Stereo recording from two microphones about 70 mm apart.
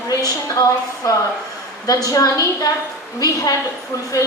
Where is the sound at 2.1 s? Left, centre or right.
Left.